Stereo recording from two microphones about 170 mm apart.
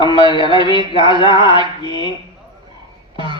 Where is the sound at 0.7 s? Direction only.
25° right (ahead or behind).